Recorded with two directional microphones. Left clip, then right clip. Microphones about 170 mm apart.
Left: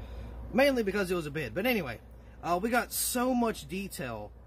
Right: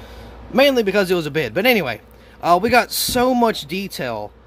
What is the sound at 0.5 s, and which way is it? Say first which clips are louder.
Speech: right 12 dB; 35° right (ahead or behind).